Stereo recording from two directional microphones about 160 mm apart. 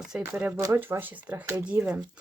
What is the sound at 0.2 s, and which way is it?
Speech, 10° right (ahead or behind).